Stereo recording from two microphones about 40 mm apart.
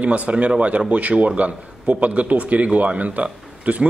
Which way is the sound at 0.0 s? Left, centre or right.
Right.